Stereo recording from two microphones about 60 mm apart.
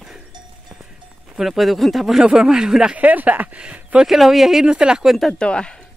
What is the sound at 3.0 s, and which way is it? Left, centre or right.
Speech, right.